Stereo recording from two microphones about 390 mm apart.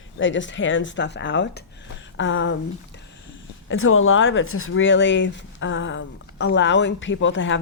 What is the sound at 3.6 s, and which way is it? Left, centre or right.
Speech, left.